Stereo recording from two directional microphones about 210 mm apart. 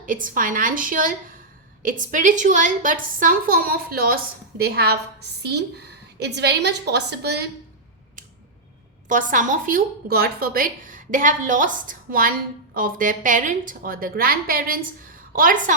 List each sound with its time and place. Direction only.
0.0 s a woman's voice: 40° right (ahead or behind)
9.0 s a woman's voice: 35° right (ahead or behind)